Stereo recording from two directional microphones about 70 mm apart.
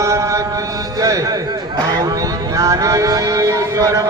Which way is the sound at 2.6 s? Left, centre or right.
Right.